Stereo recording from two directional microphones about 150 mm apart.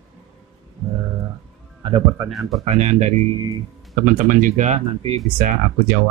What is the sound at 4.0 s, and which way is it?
Speech, 65° right (ahead or behind).